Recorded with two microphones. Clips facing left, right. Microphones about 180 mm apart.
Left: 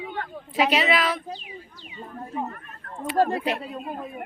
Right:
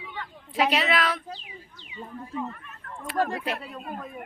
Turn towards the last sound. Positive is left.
turn(degrees=30)  # may be behind; listen again after turning